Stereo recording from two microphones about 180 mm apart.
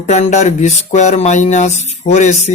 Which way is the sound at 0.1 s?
40° left (ahead or behind).